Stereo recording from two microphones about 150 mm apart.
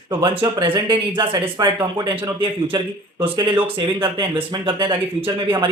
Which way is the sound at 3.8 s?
30° right (ahead or behind).